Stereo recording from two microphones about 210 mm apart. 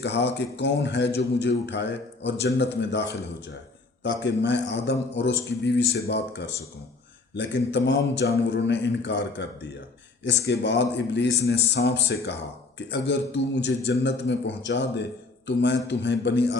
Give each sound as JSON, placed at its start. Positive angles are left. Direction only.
{"t": 0.0, "sound": "a man's voice", "side_deg": 55}